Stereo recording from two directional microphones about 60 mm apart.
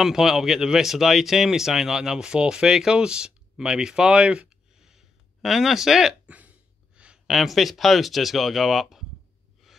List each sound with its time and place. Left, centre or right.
0.0 s speech: centre
6.2 s a sound: right
7.2 s speech: centre